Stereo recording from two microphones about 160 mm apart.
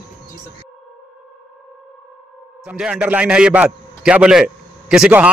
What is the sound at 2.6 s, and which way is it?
A man's voice, 5° right (ahead or behind).